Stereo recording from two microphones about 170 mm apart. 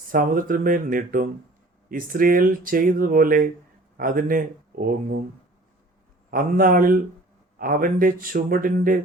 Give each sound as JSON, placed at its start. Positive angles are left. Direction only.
{"t": 0.1, "sound": "speech", "side_deg": -55}
{"t": 6.3, "sound": "speech", "side_deg": -55}